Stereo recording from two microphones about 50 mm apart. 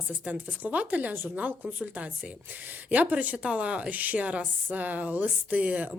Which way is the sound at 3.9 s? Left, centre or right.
Right.